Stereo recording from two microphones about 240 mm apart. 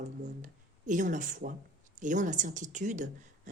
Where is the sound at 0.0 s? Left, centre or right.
Right.